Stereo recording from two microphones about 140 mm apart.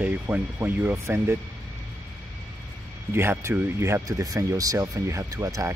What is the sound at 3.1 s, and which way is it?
Speech, 20° right (ahead or behind).